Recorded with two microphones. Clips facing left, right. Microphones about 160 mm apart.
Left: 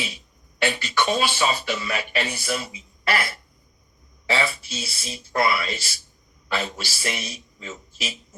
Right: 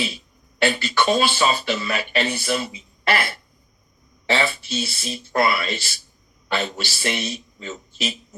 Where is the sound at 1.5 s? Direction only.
25° right (ahead or behind).